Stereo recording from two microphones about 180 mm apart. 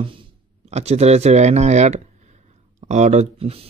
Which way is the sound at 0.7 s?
35° right (ahead or behind).